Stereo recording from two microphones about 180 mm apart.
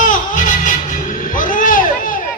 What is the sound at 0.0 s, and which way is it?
Music, 50° left (ahead or behind).